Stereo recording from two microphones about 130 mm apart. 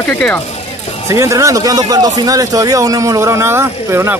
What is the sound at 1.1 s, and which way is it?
A man's voice, 25° right (ahead or behind).